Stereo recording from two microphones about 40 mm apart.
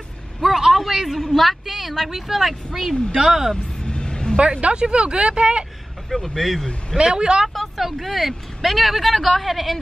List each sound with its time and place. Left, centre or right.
0.4 s a sound: centre
1.2 s speech: centre
3.8 s vehicle: left
4.4 s speech: right
6.0 s speech: centre
7.0 s speech: right
7.4 s speech: centre